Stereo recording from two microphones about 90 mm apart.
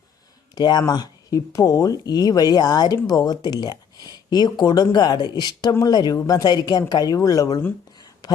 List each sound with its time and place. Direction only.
0.5 s speech: 50° left (ahead or behind)